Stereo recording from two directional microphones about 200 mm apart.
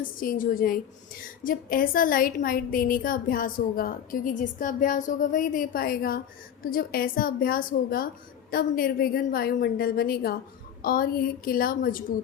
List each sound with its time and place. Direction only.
0.0 s a woman's voice: 45° left (ahead or behind)